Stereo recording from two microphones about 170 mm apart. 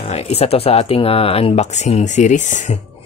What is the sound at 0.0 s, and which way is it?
Speech, 40° left (ahead or behind).